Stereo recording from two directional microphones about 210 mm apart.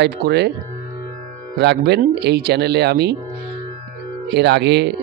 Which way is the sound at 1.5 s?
50° right (ahead or behind).